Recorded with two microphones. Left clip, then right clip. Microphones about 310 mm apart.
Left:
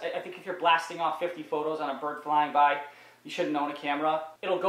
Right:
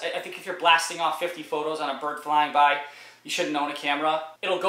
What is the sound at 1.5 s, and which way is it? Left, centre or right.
Speech, left.